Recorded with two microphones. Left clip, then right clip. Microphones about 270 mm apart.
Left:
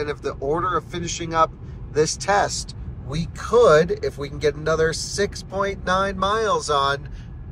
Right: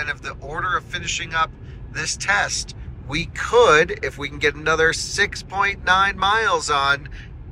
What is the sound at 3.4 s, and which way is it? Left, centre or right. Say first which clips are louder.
Speech: right 1 dB; centre.